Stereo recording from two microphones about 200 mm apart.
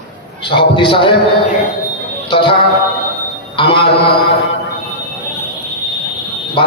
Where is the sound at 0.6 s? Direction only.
25° left (ahead or behind).